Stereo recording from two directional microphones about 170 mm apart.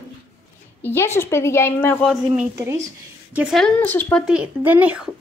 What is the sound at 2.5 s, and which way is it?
Speech, 15° right (ahead or behind).